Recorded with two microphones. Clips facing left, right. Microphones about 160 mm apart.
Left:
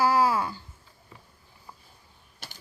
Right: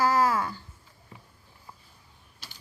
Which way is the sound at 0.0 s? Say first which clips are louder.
Left 1 dB; 10° left (ahead or behind).